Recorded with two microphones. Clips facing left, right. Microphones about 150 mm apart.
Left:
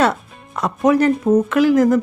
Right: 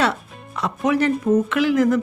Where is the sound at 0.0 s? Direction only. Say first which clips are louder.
Left 4 dB; 45° left (ahead or behind).